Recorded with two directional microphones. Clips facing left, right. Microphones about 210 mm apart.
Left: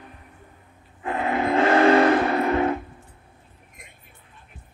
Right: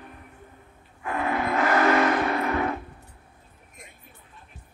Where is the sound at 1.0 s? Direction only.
25° left (ahead or behind).